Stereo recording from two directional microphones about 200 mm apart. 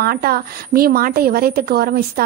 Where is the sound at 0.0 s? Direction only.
50° right (ahead or behind).